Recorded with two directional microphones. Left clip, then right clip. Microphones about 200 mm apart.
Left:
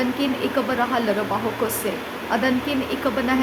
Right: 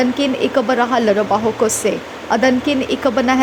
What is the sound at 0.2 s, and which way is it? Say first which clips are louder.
Speech: right 6 dB; 30° right (ahead or behind).